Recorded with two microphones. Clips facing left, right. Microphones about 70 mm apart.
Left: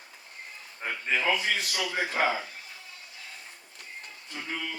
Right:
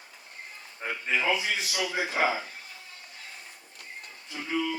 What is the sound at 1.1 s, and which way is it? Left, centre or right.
Speech, left.